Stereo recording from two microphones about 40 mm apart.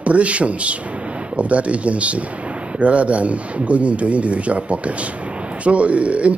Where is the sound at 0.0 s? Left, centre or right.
Right.